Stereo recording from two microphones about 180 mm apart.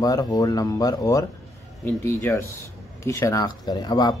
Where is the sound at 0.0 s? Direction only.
20° left (ahead or behind).